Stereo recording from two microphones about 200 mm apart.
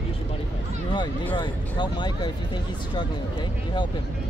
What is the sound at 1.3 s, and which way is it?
Speech, 20° left (ahead or behind).